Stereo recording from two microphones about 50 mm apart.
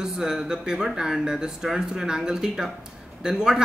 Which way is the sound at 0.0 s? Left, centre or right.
Centre.